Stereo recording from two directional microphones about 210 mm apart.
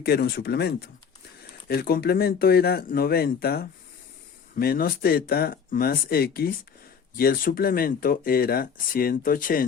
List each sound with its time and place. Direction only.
0.0 s speech: 50° left (ahead or behind)